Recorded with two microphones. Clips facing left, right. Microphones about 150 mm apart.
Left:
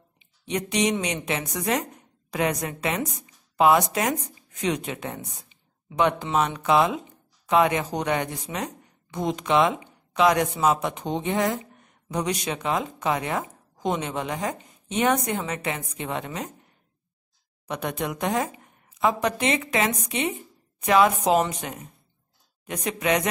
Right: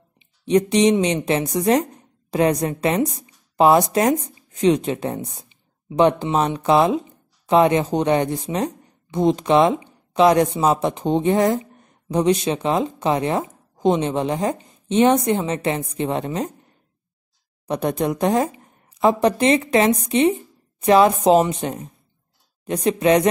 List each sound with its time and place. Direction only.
0.5 s a woman's voice: 30° right (ahead or behind)
17.6 s a woman's voice: 35° right (ahead or behind)